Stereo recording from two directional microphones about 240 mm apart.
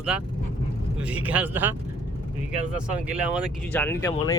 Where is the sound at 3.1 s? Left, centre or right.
Centre.